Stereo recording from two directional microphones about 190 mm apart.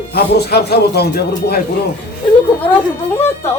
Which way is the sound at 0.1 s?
55° left (ahead or behind).